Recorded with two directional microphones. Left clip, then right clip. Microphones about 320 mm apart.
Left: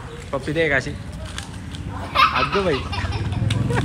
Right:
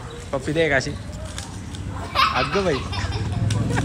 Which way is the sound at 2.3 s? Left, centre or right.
Centre.